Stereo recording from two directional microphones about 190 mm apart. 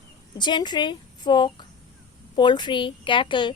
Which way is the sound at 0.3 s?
25° left (ahead or behind).